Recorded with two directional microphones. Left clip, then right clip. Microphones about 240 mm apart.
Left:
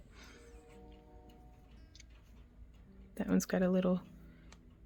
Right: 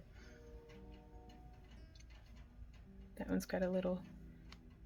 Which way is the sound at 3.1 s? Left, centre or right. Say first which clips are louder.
Left 6 dB; left.